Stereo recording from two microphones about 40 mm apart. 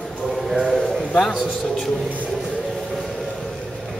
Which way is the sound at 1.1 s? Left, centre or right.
Centre.